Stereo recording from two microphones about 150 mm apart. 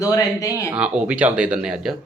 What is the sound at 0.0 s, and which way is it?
Speech, 25° left (ahead or behind).